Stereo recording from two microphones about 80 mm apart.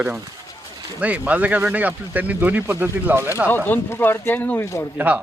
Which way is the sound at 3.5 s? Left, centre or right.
Left.